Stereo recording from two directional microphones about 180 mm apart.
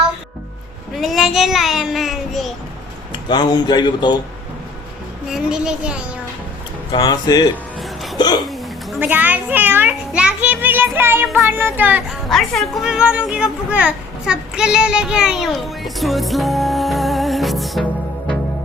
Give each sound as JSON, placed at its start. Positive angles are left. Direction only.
{"t": 0.9, "sound": "a child's voice", "side_deg": 0}
{"t": 3.1, "sound": "speech", "side_deg": 25}
{"t": 5.3, "sound": "speech", "side_deg": -5}
{"t": 6.9, "sound": "speech", "side_deg": 25}
{"t": 8.4, "sound": "a child's voice", "side_deg": -5}